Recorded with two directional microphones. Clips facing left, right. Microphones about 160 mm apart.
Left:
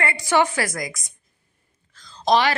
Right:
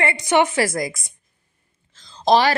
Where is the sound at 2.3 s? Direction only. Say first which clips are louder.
Right 3 dB; 35° right (ahead or behind).